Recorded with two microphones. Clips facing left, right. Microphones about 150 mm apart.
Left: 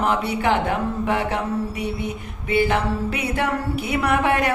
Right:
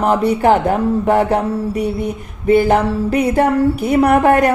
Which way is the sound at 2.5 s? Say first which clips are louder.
Right 8 dB; 45° right (ahead or behind).